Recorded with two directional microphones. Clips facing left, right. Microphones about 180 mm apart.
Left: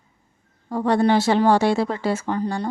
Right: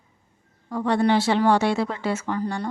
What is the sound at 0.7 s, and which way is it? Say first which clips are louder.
Speech: left 2 dB; 35° left (ahead or behind).